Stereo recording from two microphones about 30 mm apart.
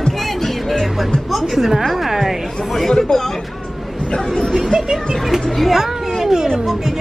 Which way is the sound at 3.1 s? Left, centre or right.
Left.